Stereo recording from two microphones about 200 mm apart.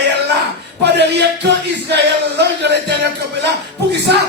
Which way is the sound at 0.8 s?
55° right (ahead or behind).